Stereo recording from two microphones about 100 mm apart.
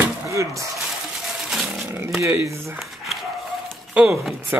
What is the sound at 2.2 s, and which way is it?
Speech, 30° right (ahead or behind).